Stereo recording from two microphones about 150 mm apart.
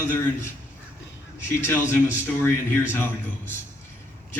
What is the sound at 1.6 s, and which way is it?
Speech, 15° left (ahead or behind).